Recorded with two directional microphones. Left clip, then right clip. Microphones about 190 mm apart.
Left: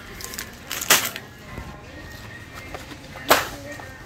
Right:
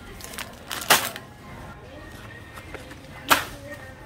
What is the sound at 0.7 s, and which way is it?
Typewriter, 30° right (ahead or behind).